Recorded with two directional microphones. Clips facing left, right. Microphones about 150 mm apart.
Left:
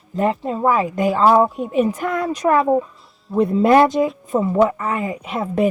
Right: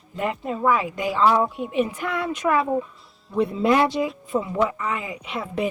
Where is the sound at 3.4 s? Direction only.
50° left (ahead or behind).